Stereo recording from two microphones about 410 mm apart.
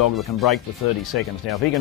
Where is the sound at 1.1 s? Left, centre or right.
Left.